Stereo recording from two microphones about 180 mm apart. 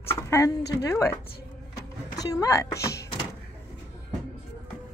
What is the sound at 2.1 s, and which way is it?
Speech, 20° left (ahead or behind).